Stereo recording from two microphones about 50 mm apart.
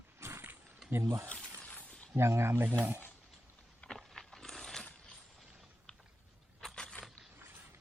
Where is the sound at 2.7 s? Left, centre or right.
Right.